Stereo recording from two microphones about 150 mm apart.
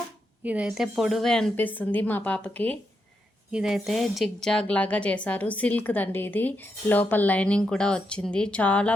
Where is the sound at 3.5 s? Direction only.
5° right (ahead or behind).